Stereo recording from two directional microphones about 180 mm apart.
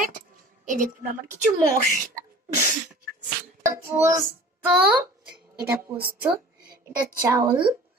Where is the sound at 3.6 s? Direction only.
15° right (ahead or behind).